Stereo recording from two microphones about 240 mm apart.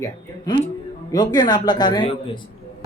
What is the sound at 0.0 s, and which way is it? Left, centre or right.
Speech, centre.